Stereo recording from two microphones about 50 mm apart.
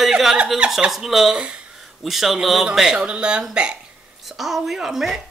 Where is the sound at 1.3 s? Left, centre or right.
Centre.